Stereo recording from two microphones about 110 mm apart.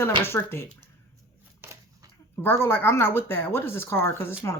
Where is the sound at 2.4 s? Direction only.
20° left (ahead or behind).